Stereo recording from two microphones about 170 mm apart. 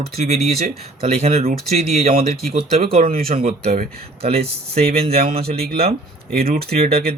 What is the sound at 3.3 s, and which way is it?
Speech, 35° right (ahead or behind).